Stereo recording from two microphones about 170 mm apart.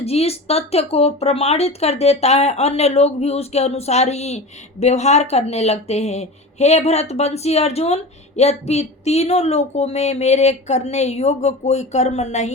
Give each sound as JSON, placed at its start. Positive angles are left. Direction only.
{"t": 0.0, "sound": "speech", "side_deg": 35}